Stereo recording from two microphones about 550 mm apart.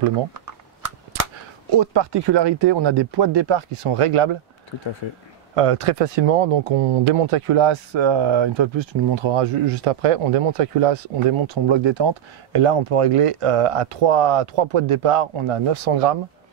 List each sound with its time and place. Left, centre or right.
1.7 s speech: right
5.5 s speech: right
11.4 s speech: right